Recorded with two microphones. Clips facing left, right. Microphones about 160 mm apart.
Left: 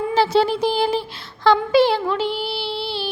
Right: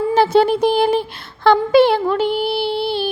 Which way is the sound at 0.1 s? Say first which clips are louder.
Right 4 dB; 55° right (ahead or behind).